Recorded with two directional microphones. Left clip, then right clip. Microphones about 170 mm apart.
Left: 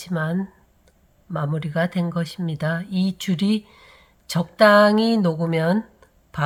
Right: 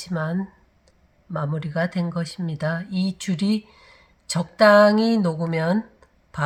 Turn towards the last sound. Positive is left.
turn(degrees=20)  # may be behind; listen again after turning